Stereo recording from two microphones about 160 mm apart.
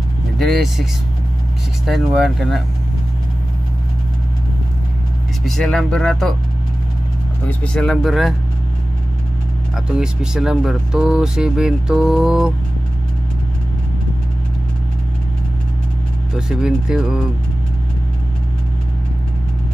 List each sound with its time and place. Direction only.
0.4 s speech: centre (ahead or behind)
1.9 s speech: centre (ahead or behind)
5.4 s speech: centre (ahead or behind)
7.4 s speech: 5° left (ahead or behind)
9.8 s speech: 5° right (ahead or behind)
16.3 s speech: 5° right (ahead or behind)